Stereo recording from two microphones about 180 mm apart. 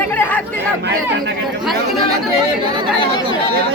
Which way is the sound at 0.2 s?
10° left (ahead or behind).